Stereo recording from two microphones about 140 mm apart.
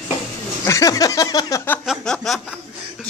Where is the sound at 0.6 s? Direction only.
20° left (ahead or behind).